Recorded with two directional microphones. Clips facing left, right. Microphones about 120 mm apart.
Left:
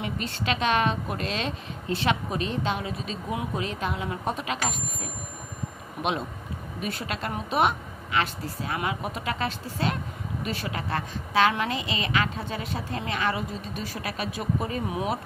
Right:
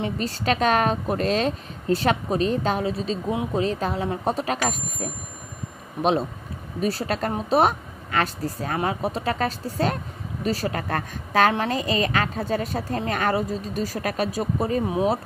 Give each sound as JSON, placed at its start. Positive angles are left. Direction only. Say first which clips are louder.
{"t": 0.0, "sound": "a woman's voice", "louder": "right 5 dB", "side_deg": -40}
{"t": 6.8, "sound": "a woman's voice", "louder": "right 8 dB", "side_deg": -35}